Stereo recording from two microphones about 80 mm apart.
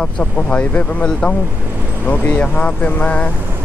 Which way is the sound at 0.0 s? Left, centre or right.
Centre.